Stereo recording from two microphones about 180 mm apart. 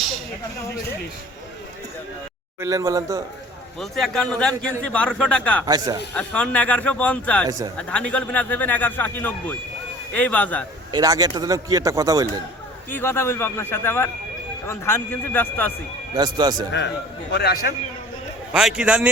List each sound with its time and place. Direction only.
2.6 s a man's voice: 20° right (ahead or behind)
3.8 s a man's voice: centre (ahead or behind)
5.6 s a man's voice: 20° right (ahead or behind)
6.1 s a man's voice: 5° left (ahead or behind)
10.9 s a man's voice: 20° right (ahead or behind)
12.9 s a man's voice: 10° left (ahead or behind)
16.1 s a man's voice: 25° right (ahead or behind)
17.3 s a man's voice: 60° left (ahead or behind)
18.5 s a man's voice: 5° right (ahead or behind)